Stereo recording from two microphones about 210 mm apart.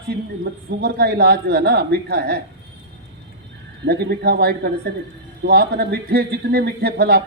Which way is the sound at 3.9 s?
50° right (ahead or behind).